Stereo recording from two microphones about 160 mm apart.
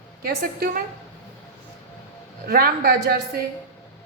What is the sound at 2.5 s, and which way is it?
Speech, 70° right (ahead or behind).